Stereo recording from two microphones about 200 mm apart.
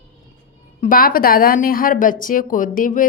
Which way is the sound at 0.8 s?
45° left (ahead or behind).